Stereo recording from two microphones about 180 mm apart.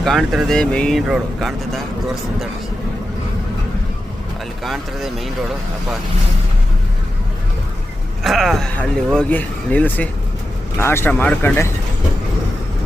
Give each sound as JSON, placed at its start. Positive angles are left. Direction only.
{"t": 0.0, "sound": "speech", "side_deg": 0}
{"t": 4.6, "sound": "speech", "side_deg": 0}
{"t": 8.2, "sound": "speech", "side_deg": 0}